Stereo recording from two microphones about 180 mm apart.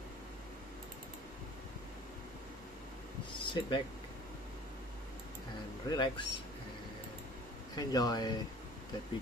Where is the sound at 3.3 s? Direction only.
25° left (ahead or behind).